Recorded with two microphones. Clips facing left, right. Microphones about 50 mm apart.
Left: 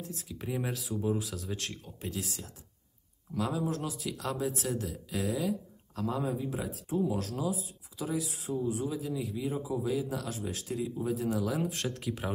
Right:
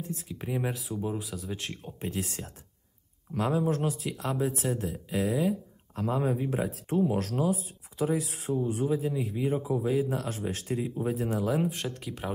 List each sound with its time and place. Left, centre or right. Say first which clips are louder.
0.3 s speech: right 2 dB; centre
2.0 s speech: right 4 dB; right
4.0 s speech: right 3 dB; right
4.7 s speech: right 2 dB; centre
5.1 s speech: right 4 dB; right
9.3 s speech: right 5 dB; right
9.8 s speech: right 4 dB; right
11.6 s speech: right 1 dB; centre